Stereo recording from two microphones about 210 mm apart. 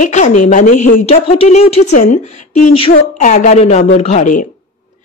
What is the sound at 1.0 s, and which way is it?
A woman's voice, 30° left (ahead or behind).